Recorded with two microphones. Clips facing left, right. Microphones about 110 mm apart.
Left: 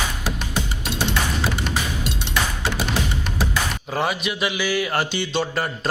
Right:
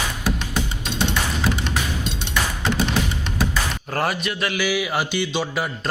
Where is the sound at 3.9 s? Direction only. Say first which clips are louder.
Even; 5° left (ahead or behind).